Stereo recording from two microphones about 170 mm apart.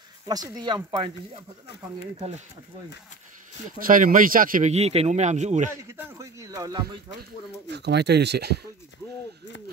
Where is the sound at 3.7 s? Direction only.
55° right (ahead or behind).